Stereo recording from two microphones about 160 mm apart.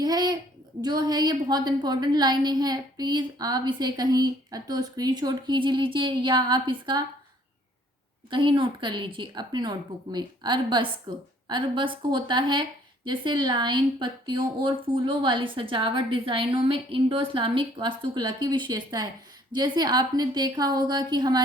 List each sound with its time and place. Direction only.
0.0 s a woman's voice: 25° right (ahead or behind)
8.3 s a woman's voice: 30° right (ahead or behind)